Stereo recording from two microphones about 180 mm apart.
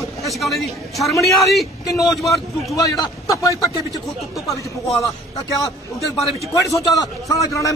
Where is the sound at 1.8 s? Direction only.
20° left (ahead or behind).